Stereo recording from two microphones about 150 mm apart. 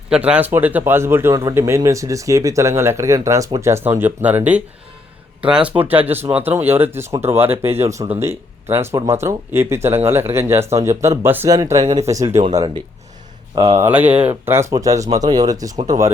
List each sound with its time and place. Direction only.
0.1 s speech: 10° right (ahead or behind)
12.5 s speech: 30° right (ahead or behind)
13.9 s speech: 10° right (ahead or behind)